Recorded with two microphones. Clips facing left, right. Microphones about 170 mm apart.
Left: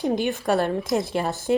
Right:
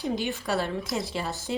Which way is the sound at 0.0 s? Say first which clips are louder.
Left 6 dB; 55° left (ahead or behind).